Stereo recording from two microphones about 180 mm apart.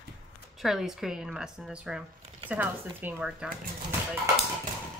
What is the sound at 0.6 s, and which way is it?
Speech, centre (ahead or behind).